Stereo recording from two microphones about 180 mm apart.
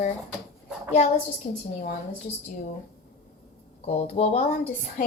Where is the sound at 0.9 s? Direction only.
35° left (ahead or behind).